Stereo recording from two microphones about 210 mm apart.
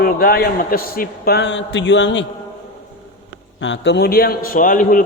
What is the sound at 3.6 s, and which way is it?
A man's voice, 60° left (ahead or behind).